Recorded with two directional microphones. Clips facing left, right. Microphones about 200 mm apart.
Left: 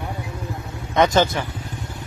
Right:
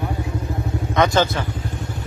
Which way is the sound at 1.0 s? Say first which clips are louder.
Left 1 dB; 20° left (ahead or behind).